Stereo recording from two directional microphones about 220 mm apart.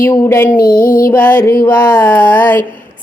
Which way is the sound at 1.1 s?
10° left (ahead or behind).